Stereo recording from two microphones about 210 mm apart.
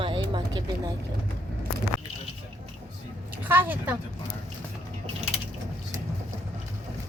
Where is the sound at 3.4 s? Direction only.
10° right (ahead or behind).